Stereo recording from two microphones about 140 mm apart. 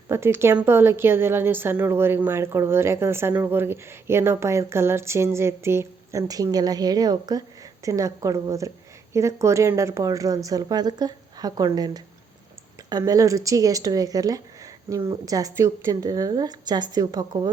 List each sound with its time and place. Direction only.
0.1 s a woman's voice: 20° right (ahead or behind)